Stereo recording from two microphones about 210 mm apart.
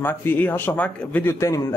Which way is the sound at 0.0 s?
10° left (ahead or behind).